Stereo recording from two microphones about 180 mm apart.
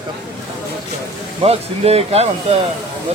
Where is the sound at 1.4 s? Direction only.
35° right (ahead or behind).